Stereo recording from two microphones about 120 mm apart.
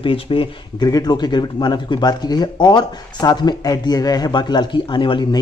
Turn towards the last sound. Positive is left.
turn(degrees=40)  # may be behind; listen again after turning